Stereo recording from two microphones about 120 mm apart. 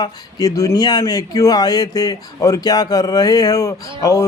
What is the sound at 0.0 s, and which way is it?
A man's voice, 30° left (ahead or behind).